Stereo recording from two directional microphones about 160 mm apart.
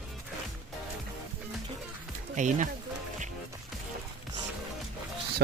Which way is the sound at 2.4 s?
50° right (ahead or behind).